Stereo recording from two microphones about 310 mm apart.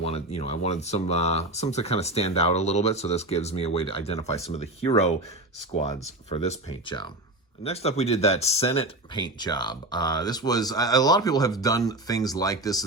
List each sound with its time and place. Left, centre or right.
0.0 s speech: centre
6.2 s speech: left